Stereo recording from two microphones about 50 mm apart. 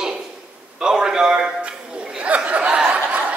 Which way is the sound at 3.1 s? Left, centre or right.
Right.